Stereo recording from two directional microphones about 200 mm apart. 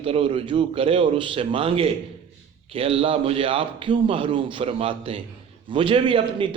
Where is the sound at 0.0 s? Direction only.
25° right (ahead or behind).